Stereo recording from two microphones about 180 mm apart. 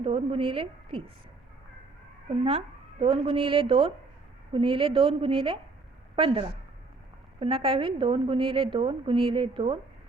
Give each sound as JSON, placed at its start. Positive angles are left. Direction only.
{"t": 0.0, "sound": "speech", "side_deg": -30}
{"t": 2.4, "sound": "a woman's voice", "side_deg": -30}